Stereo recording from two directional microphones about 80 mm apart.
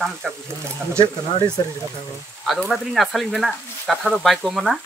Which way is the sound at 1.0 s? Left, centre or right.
Left.